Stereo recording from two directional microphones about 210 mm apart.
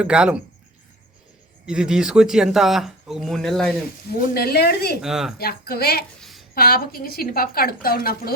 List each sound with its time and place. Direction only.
0.0 s speech: 5° right (ahead or behind)
1.6 s speech: 5° right (ahead or behind)
4.1 s a woman's voice: 45° left (ahead or behind)
5.0 s speech: centre (ahead or behind)
5.4 s a woman's voice: 45° left (ahead or behind)
6.1 s a sound: centre (ahead or behind)
6.5 s a woman's voice: 45° left (ahead or behind)